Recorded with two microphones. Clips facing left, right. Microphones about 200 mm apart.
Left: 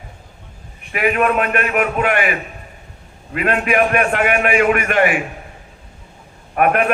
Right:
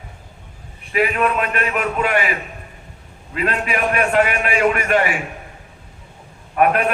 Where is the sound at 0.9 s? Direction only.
55° left (ahead or behind).